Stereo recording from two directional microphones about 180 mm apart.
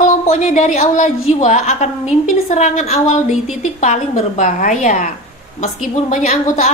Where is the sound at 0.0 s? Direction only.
45° left (ahead or behind).